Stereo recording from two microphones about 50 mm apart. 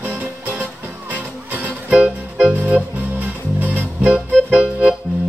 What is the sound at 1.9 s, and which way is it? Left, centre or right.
Music, right.